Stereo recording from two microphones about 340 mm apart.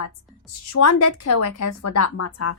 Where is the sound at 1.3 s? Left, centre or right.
Left.